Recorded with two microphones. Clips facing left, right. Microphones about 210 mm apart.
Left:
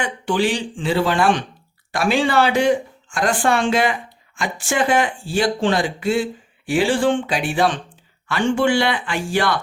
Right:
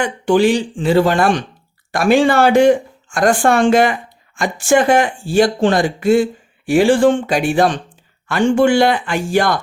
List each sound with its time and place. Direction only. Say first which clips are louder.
0.0 s speech: right 7 dB; 45° right (ahead or behind)